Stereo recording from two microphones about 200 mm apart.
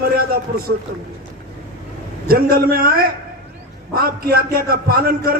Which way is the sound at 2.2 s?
45° right (ahead or behind).